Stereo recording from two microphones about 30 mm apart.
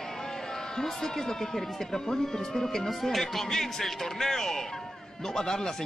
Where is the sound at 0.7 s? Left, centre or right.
Centre.